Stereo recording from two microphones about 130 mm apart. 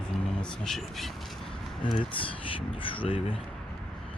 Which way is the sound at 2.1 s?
40° left (ahead or behind).